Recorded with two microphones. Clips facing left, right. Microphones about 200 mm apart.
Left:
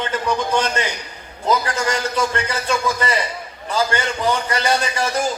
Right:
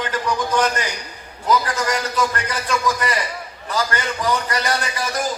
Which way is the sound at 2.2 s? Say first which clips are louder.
Left 1 dB; 25° left (ahead or behind).